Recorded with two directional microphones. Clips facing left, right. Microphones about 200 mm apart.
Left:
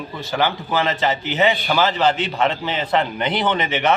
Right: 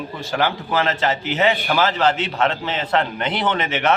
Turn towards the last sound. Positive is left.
turn(degrees=-5)  # may be behind; listen again after turning